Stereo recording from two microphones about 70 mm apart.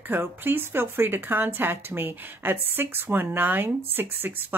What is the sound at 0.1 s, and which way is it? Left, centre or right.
Speech, right.